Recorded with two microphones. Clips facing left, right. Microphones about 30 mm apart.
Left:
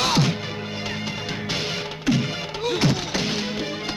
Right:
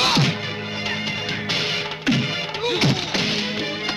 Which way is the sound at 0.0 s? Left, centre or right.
Right.